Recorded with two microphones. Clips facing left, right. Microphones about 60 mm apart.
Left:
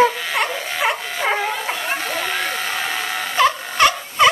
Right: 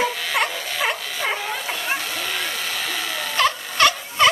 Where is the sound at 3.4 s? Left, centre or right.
Centre.